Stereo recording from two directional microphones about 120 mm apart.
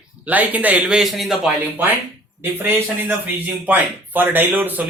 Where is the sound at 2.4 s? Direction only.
20° right (ahead or behind).